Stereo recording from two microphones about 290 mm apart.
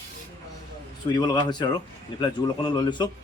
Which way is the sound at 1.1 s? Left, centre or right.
Centre.